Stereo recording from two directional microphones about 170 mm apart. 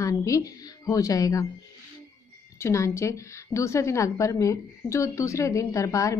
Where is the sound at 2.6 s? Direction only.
15° left (ahead or behind).